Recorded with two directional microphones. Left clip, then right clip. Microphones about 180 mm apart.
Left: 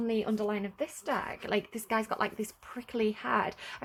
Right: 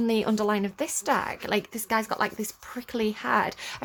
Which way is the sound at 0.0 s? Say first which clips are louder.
Right 6 dB; 40° right (ahead or behind).